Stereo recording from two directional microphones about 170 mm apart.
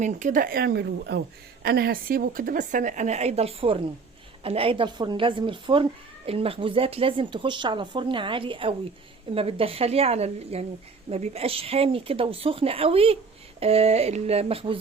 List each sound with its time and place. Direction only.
0.0 s speech: 45° right (ahead or behind); by 1.2 s 80° right
1.6 s a woman's voice: 65° right (ahead or behind); by 14.8 s 35° right (ahead or behind)